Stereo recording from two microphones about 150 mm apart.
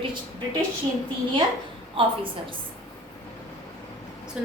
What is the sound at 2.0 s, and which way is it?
Speech, 35° right (ahead or behind).